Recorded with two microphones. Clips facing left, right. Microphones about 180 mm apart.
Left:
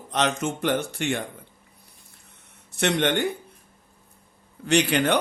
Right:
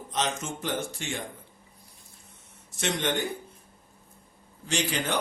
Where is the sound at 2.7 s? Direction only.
65° left (ahead or behind).